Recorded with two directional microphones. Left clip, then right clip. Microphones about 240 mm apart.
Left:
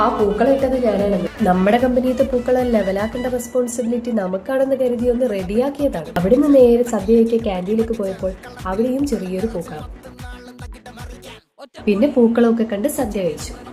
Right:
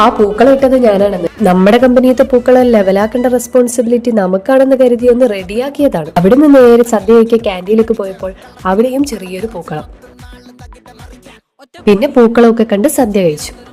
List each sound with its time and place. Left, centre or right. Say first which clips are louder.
0.9 s speech: right 8 dB; right
11.9 s speech: right 8 dB; right